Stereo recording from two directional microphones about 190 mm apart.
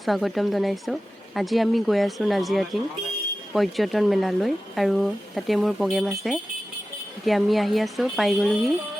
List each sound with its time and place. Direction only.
0.0 s speech: centre (ahead or behind)